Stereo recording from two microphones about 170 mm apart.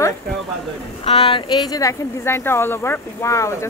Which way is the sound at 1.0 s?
35° left (ahead or behind).